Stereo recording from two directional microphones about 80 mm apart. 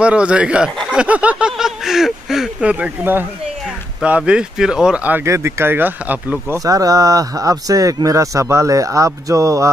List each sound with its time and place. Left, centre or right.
0.0 s speech: centre
1.6 s speech: centre
2.6 s speech: centre
4.3 s speech: centre
5.2 s speech: right
6.6 s speech: right